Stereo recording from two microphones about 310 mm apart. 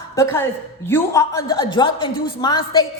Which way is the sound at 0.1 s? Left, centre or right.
Centre.